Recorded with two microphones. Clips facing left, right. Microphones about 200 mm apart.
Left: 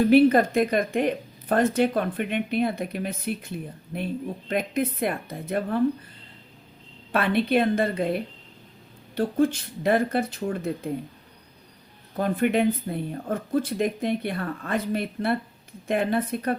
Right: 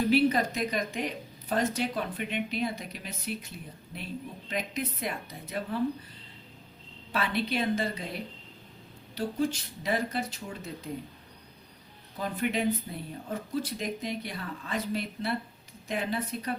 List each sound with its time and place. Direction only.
0.1 s speech: 55° left (ahead or behind)
7.1 s speech: 55° left (ahead or behind)
12.1 s speech: 55° left (ahead or behind)